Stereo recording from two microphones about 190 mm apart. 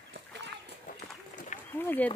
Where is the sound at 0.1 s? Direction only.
60° right (ahead or behind).